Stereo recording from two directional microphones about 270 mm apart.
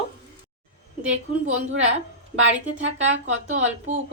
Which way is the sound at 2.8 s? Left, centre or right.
Right.